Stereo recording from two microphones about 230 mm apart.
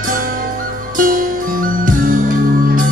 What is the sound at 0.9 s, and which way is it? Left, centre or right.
Music, right.